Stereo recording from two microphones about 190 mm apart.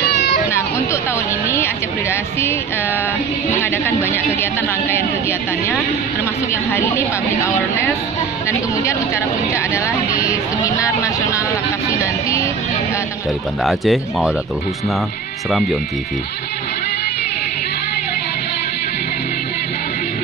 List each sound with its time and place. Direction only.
0.2 s a sound: 50° left (ahead or behind)
1.5 s music: 15° left (ahead or behind)
3.7 s a woman's voice: 10° left (ahead or behind)
6.5 s a woman's voice: 15° left (ahead or behind)
12.0 s a woman's voice: 15° left (ahead or behind)
13.7 s speech: centre (ahead or behind)